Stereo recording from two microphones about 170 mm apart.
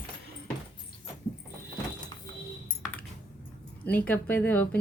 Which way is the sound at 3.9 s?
10° left (ahead or behind).